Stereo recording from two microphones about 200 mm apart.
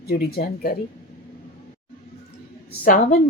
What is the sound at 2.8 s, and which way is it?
Speech, 40° left (ahead or behind).